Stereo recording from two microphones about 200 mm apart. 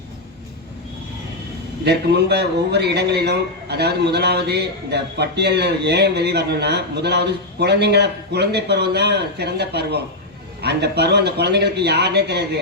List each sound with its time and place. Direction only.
1.8 s a man's voice: 55° right (ahead or behind)